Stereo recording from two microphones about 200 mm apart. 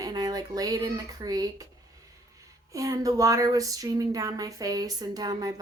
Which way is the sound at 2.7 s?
15° right (ahead or behind).